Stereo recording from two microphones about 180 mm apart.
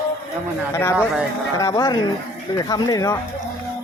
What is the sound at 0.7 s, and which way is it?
Speech, 15° left (ahead or behind).